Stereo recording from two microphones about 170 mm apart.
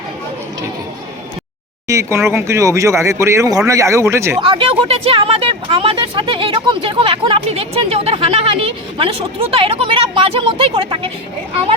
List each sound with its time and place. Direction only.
1.9 s speech: 15° right (ahead or behind)
4.4 s speech: 30° right (ahead or behind)